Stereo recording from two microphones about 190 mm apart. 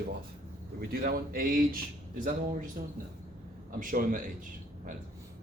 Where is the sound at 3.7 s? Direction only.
45° right (ahead or behind).